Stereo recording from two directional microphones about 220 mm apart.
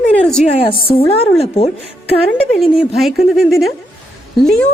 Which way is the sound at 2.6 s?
Centre (ahead or behind).